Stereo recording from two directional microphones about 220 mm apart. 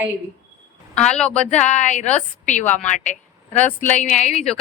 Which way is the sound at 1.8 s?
35° left (ahead or behind).